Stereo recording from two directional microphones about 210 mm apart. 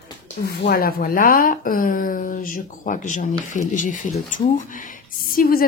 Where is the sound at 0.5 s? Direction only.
45° left (ahead or behind).